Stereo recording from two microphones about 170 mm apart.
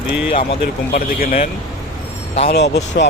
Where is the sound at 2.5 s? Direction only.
75° left (ahead or behind).